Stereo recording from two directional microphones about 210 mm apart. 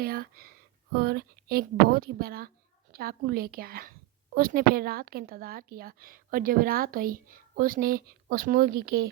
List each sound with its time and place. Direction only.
0.0 s a woman's voice: 45° right (ahead or behind)